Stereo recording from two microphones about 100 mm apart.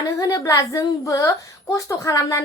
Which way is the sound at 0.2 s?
35° left (ahead or behind).